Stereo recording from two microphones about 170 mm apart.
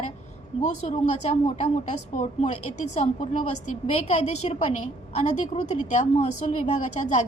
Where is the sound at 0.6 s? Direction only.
40° left (ahead or behind).